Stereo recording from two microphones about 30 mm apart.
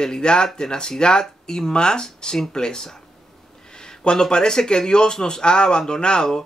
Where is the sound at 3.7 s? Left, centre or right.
Left.